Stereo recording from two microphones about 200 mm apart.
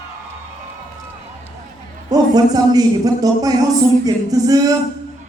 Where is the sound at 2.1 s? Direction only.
20° right (ahead or behind).